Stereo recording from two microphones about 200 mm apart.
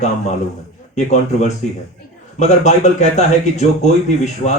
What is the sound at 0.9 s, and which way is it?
A man's voice, 35° left (ahead or behind).